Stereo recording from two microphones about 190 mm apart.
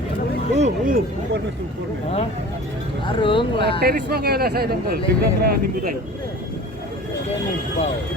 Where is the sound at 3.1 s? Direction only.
25° left (ahead or behind).